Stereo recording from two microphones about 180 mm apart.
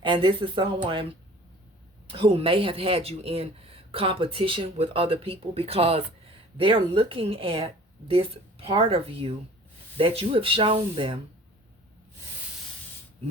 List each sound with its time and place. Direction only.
0.0 s speech: 25° right (ahead or behind)
2.0 s a woman's voice: 30° right (ahead or behind)